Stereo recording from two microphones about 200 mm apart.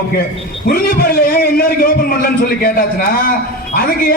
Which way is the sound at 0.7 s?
50° left (ahead or behind).